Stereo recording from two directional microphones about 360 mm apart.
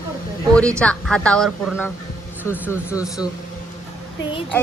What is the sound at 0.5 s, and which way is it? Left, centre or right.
Speech, centre.